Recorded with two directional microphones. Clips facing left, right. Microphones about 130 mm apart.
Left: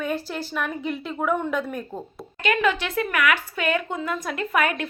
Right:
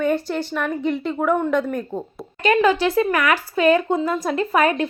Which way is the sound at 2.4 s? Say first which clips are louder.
Right 6 dB; 35° right (ahead or behind).